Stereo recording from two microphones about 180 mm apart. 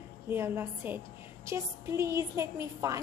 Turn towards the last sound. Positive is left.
turn(degrees=-15)  # may be behind; listen again after turning